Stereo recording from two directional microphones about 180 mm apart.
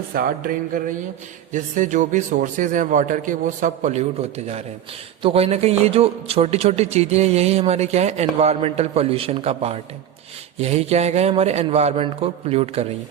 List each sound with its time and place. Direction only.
0.1 s a man's voice: 55° right (ahead or behind); by 12.9 s 35° right (ahead or behind)